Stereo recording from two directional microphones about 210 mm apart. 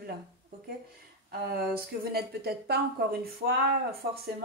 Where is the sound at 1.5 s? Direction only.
45° right (ahead or behind).